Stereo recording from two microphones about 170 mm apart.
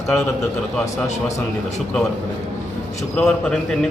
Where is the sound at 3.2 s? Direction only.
5° left (ahead or behind).